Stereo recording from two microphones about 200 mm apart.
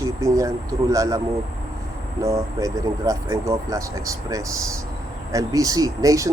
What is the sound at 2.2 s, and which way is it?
Speech, 15° right (ahead or behind).